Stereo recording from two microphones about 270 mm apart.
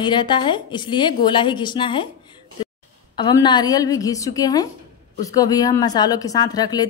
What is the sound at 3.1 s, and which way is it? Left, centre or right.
A woman's voice, centre.